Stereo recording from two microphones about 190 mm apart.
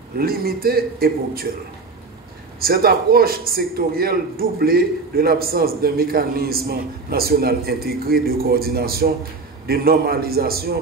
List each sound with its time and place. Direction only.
0.2 s a man's voice: 50° right (ahead or behind)
2.6 s a man's voice: 50° right (ahead or behind)